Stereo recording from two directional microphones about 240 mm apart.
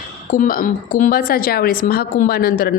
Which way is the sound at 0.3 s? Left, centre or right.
Left.